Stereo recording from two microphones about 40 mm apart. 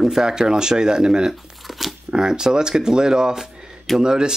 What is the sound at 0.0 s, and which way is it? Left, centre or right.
A man's voice, centre.